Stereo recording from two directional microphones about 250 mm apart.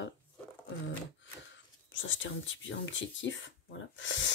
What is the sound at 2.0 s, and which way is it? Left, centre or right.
Speech, left.